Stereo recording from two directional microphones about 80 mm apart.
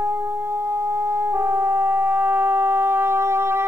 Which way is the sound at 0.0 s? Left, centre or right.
Right.